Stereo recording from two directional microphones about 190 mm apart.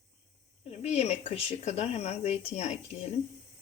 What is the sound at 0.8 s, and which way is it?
Speech, 35° left (ahead or behind).